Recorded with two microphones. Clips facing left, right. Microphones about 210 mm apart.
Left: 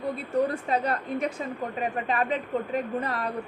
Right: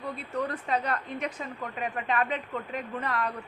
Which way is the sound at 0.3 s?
30° left (ahead or behind).